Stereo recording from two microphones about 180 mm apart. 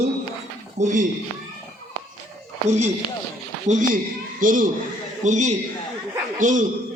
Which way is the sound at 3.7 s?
40° right (ahead or behind).